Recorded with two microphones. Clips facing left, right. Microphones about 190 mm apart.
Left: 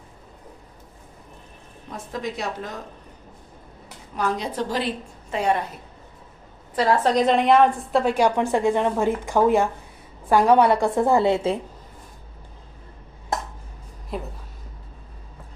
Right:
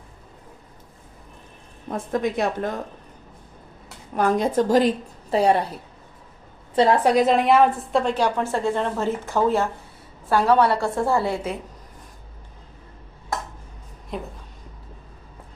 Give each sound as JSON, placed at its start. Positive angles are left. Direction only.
{"t": 1.9, "sound": "a woman's voice", "side_deg": -50}
{"t": 4.1, "sound": "a woman's voice", "side_deg": -50}
{"t": 6.7, "sound": "a woman's voice", "side_deg": -20}
{"t": 8.0, "sound": "a woman's voice", "side_deg": 10}
{"t": 14.1, "sound": "speech", "side_deg": 0}